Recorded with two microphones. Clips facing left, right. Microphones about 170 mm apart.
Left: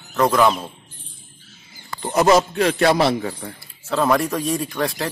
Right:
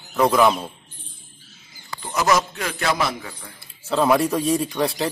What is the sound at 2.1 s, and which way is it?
A man's voice, 30° left (ahead or behind).